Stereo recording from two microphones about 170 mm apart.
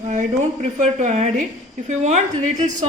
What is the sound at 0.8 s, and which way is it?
A woman's voice, 45° right (ahead or behind).